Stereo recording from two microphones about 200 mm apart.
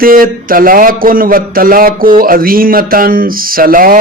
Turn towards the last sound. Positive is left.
turn(degrees=-45)  # may be behind; listen again after turning